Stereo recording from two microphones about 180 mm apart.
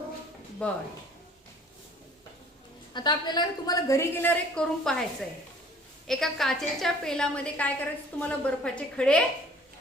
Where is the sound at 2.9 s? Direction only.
25° left (ahead or behind); by 5.0 s 5° left (ahead or behind).